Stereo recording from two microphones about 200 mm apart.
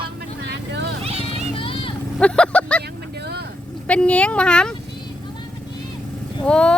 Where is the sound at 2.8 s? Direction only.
55° right (ahead or behind).